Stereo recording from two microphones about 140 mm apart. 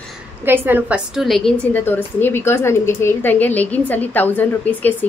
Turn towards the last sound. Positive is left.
turn(degrees=10)  # may be behind; listen again after turning